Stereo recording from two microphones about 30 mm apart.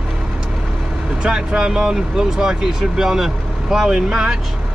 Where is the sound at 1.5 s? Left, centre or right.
Right.